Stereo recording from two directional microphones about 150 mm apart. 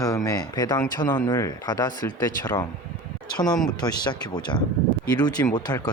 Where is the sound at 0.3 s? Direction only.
25° left (ahead or behind).